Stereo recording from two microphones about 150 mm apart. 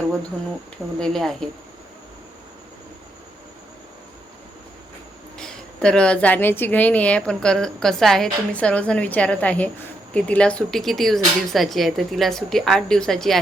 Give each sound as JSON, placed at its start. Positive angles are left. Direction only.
{"t": 0.9, "sound": "speech", "side_deg": 5}
{"t": 5.4, "sound": "a woman's voice", "side_deg": 5}